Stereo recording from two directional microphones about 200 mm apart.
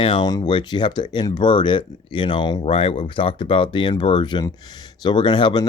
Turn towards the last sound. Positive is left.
turn(degrees=20)  # may be behind; listen again after turning